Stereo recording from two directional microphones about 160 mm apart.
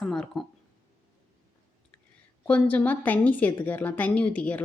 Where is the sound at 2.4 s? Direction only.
10° left (ahead or behind).